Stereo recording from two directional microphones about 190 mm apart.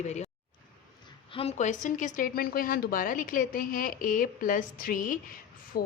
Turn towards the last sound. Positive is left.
turn(degrees=50)  # may be behind; listen again after turning